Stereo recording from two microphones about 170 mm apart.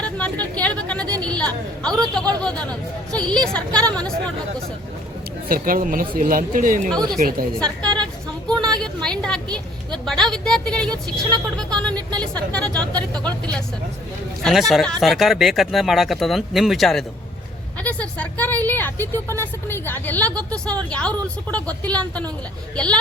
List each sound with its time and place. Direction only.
0.0 s a woman's voice: 5° left (ahead or behind)
5.5 s speech: 55° right (ahead or behind)
6.9 s a woman's voice: 5° left (ahead or behind)